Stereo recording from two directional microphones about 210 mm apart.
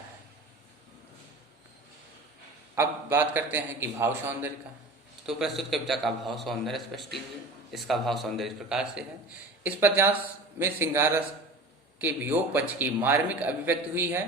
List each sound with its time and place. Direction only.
2.7 s a man's voice: 10° right (ahead or behind)